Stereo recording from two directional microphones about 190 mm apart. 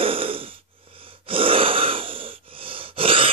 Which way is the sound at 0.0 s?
30° right (ahead or behind).